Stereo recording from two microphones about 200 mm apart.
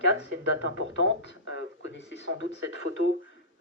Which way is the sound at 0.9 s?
65° left (ahead or behind).